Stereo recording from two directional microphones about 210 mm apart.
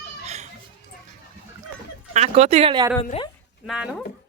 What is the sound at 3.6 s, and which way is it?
Speech, 5° right (ahead or behind).